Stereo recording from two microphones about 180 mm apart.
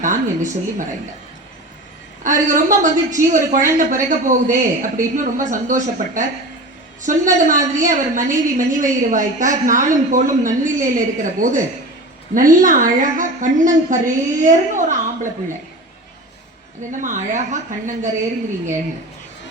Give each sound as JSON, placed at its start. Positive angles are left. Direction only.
{"t": 0.0, "sound": "a woman's voice", "side_deg": -45}
{"t": 2.2, "sound": "a woman's voice", "side_deg": -45}
{"t": 16.9, "sound": "a woman's voice", "side_deg": -45}